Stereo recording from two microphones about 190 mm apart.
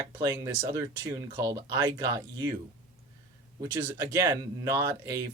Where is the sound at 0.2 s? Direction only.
15° right (ahead or behind).